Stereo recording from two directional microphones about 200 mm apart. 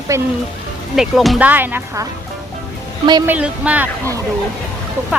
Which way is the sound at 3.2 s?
5° right (ahead or behind).